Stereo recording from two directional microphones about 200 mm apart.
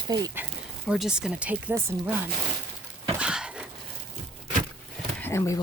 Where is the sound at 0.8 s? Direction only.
Centre (ahead or behind).